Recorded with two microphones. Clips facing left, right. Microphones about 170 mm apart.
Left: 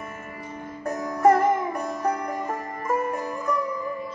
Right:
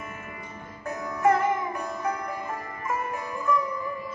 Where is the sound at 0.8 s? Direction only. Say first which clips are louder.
Left 4 dB; 40° left (ahead or behind).